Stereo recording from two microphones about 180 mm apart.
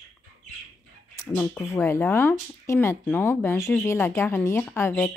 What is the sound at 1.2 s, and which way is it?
Speech, 10° left (ahead or behind).